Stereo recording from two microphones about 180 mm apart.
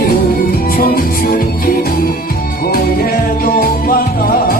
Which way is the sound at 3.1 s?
50° left (ahead or behind).